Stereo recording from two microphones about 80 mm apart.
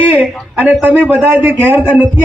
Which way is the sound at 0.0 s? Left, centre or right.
Right.